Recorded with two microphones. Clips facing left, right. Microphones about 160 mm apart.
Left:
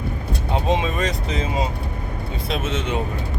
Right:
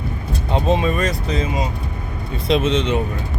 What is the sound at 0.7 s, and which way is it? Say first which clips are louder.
Speech: right 3 dB; 20° left (ahead or behind).